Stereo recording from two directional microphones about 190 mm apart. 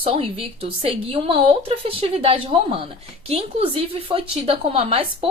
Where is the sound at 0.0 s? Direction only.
30° right (ahead or behind).